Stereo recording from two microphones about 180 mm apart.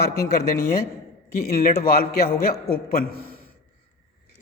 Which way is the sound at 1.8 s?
60° left (ahead or behind).